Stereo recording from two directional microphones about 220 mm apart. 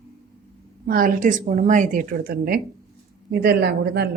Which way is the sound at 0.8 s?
40° right (ahead or behind).